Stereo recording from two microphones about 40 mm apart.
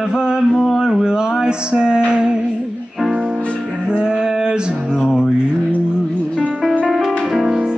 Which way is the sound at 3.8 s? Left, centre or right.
Right.